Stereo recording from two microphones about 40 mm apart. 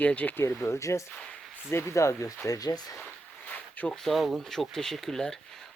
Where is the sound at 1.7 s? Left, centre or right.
Left.